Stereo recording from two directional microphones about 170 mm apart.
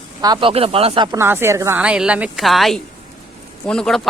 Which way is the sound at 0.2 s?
25° right (ahead or behind).